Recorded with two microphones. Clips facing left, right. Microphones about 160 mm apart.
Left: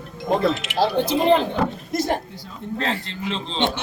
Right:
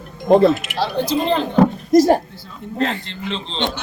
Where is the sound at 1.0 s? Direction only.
20° left (ahead or behind).